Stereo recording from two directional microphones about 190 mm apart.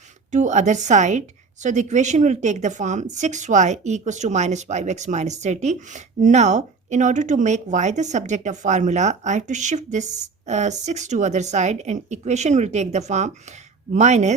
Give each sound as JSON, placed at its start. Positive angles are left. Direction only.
{"t": 0.3, "sound": "speech", "side_deg": -40}